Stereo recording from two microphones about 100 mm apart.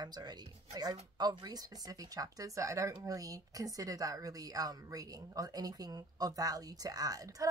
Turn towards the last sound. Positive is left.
turn(degrees=-35)  # may be behind; listen again after turning